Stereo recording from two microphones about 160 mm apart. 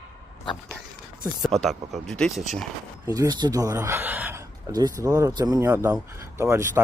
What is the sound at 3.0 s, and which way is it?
Speech, 20° right (ahead or behind).